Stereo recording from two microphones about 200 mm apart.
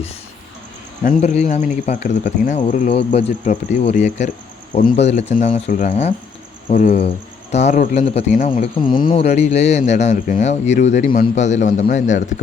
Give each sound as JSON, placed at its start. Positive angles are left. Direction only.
{"t": 1.0, "sound": "speech", "side_deg": 35}